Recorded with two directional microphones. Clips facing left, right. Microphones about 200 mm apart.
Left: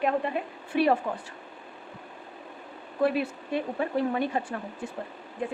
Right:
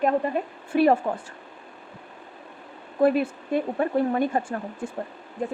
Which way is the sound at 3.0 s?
50° right (ahead or behind).